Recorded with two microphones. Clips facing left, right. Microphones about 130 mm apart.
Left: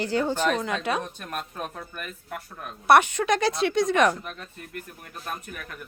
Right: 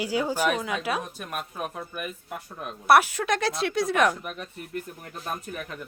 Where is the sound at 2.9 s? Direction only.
5° right (ahead or behind).